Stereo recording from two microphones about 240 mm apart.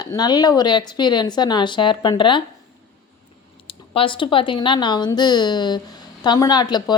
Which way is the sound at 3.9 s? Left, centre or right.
Left.